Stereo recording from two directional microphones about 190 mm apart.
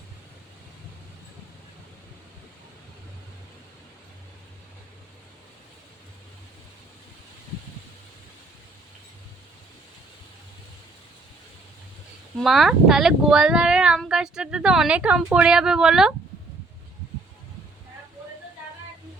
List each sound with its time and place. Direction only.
12.4 s speech: centre (ahead or behind)